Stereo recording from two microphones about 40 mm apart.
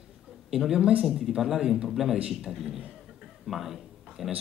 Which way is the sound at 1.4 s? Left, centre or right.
Centre.